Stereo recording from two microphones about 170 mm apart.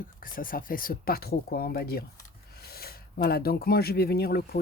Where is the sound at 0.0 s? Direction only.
55° left (ahead or behind).